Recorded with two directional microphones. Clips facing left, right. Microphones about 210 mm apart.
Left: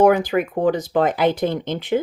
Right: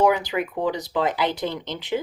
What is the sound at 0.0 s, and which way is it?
Speech, 50° left (ahead or behind).